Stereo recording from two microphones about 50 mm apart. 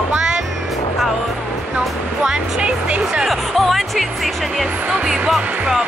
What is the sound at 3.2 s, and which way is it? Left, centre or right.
Music, centre.